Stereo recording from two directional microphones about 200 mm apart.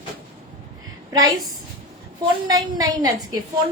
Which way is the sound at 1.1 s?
20° right (ahead or behind).